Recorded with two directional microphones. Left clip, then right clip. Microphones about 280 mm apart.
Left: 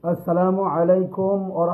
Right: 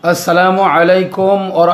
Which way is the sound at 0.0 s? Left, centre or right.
Right.